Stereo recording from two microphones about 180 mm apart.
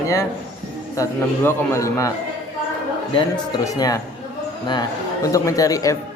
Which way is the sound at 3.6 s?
20° left (ahead or behind).